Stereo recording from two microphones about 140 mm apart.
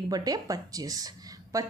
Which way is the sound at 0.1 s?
25° right (ahead or behind).